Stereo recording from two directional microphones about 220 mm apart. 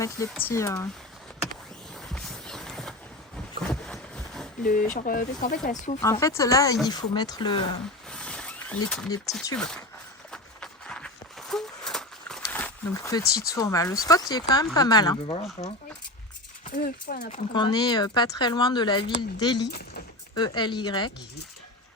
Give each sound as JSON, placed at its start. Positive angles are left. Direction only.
{"t": 0.0, "sound": "speech", "side_deg": 10}
{"t": 2.1, "sound": "clip-clop", "side_deg": 5}
{"t": 3.7, "sound": "a sound", "side_deg": 5}
{"t": 4.6, "sound": "speech", "side_deg": 35}
{"t": 6.0, "sound": "speech", "side_deg": 15}
{"t": 8.1, "sound": "wild animals", "side_deg": 5}
{"t": 9.6, "sound": "speech", "side_deg": 5}
{"t": 10.3, "sound": "horse", "side_deg": 5}
{"t": 13.2, "sound": "speech", "side_deg": 45}
{"t": 13.5, "sound": "speech", "side_deg": 15}
{"t": 16.6, "sound": "speech", "side_deg": 40}
{"t": 17.5, "sound": "speech", "side_deg": 20}
{"t": 20.6, "sound": "speech", "side_deg": 20}